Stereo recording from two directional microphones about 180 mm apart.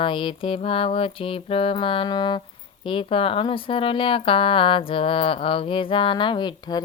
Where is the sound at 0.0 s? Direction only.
30° left (ahead or behind).